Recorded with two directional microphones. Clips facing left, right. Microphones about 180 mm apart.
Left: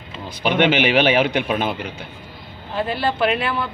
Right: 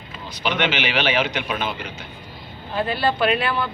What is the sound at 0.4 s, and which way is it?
A man's voice, 50° left (ahead or behind).